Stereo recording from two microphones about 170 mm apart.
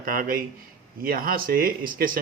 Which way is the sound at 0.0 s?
55° right (ahead or behind).